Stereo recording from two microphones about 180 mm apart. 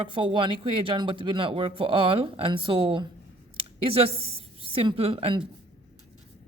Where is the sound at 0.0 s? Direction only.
30° right (ahead or behind).